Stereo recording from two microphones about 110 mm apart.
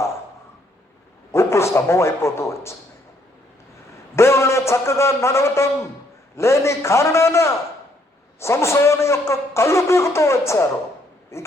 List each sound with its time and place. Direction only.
1.3 s speech: 25° left (ahead or behind)
4.1 s a man's voice: 25° left (ahead or behind)